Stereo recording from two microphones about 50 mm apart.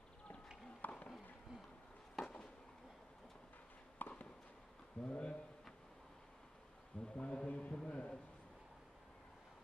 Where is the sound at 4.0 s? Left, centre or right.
Left.